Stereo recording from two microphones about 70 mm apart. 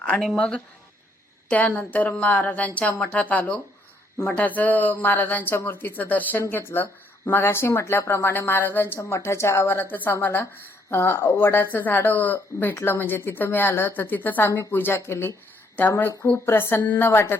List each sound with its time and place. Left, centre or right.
0.3 s a woman's voice: centre; by 15.3 s left
16.0 s a woman's voice: left